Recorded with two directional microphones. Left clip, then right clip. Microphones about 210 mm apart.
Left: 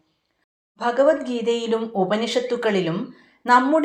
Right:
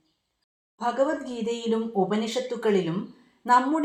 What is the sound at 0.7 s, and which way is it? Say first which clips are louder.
Speech: left 7 dB; 30° left (ahead or behind).